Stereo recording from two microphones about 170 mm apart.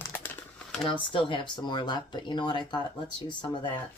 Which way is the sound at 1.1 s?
30° left (ahead or behind).